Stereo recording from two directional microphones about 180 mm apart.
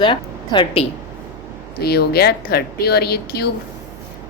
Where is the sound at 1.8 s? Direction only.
60° left (ahead or behind).